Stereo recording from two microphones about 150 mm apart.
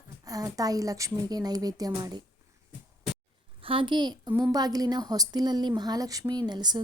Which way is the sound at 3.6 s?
35° right (ahead or behind).